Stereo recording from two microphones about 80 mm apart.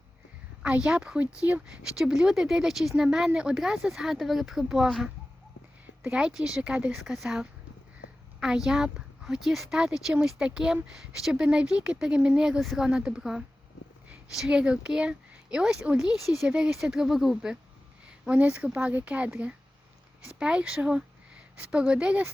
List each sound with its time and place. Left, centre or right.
0.6 s speech: centre
1.9 s speech: centre
6.0 s speech: centre
18.3 s speech: centre